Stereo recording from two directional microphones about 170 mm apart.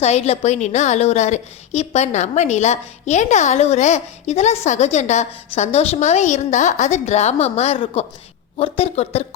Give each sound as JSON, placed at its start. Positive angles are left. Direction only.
{"t": 0.0, "sound": "a woman's voice", "side_deg": 40}